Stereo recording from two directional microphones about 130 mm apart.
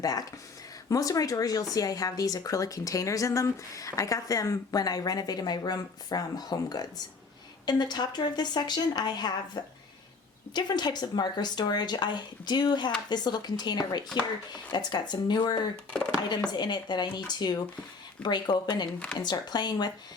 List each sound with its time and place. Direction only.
0.0 s a woman's voice: 30° left (ahead or behind)
15.7 s speech: 10° left (ahead or behind)
16.5 s speech: 35° left (ahead or behind)